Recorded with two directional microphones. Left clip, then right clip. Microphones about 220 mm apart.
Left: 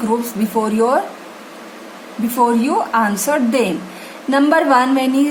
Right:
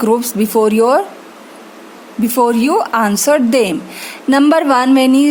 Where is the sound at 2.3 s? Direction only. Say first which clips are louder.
Right 3 dB; 45° right (ahead or behind).